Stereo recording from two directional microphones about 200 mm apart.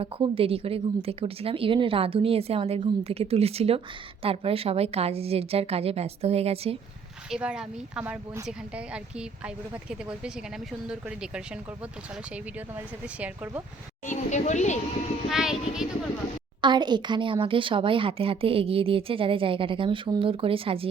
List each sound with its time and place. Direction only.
0.0 s speech: 30° right (ahead or behind)
7.3 s speech: 5° right (ahead or behind)
13.1 s speech: 5° right (ahead or behind)
14.1 s speech: 35° left (ahead or behind)
15.3 s speech: 5° right (ahead or behind)
16.6 s speech: 20° right (ahead or behind)